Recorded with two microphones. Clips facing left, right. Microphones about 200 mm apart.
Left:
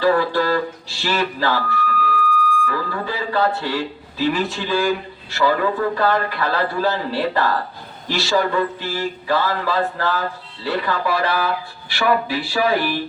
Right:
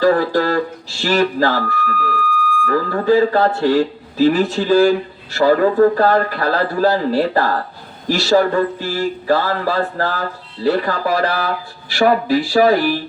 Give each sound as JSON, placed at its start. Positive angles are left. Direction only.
{"t": 0.0, "sound": "speech", "side_deg": -40}